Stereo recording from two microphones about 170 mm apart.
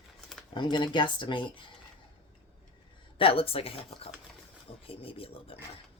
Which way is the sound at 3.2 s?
35° left (ahead or behind).